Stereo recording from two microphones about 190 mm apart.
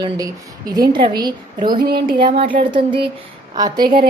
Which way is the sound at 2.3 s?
30° right (ahead or behind).